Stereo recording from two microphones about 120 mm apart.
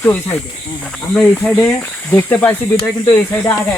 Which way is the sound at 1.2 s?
10° left (ahead or behind).